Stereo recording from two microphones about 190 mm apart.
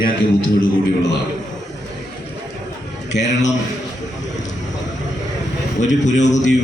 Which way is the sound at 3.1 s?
70° left (ahead or behind).